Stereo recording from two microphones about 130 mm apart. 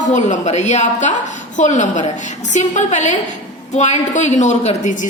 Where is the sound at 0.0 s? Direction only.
65° left (ahead or behind).